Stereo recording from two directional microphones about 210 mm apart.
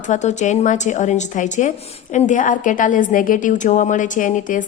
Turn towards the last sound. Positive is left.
turn(degrees=40)  # may be behind; listen again after turning